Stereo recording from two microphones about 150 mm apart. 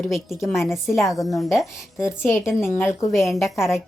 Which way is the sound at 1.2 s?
20° left (ahead or behind).